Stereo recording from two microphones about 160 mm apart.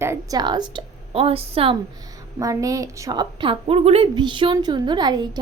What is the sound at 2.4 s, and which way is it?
A woman's voice, 20° right (ahead or behind).